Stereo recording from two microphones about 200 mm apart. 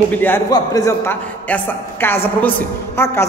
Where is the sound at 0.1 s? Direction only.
10° left (ahead or behind).